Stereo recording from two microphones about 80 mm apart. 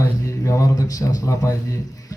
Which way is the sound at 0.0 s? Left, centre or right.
Left.